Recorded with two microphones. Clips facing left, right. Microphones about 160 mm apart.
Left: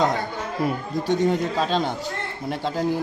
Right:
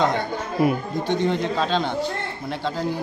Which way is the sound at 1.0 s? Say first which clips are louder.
Left 2 dB; 40° left (ahead or behind).